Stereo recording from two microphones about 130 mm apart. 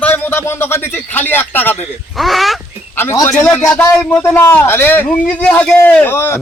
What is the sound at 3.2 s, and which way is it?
A man's voice, 15° left (ahead or behind).